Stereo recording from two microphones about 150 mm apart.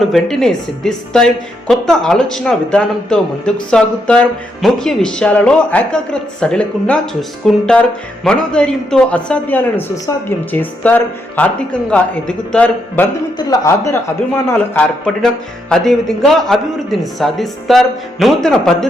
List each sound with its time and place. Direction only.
0.0 s a woman's voice: centre (ahead or behind)
13.5 s speech: 20° left (ahead or behind)
14.4 s a woman's voice: 5° left (ahead or behind)